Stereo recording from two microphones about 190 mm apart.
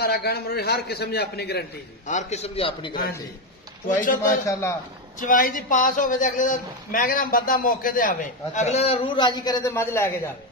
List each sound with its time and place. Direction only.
0.0 s a man's voice: 55° left (ahead or behind)
2.0 s a man's voice: 40° left (ahead or behind)
4.0 s a man's voice: 45° left (ahead or behind)
4.5 s a man's voice: 15° left (ahead or behind)
5.2 s a man's voice: 45° left (ahead or behind); by 10.3 s 15° left (ahead or behind)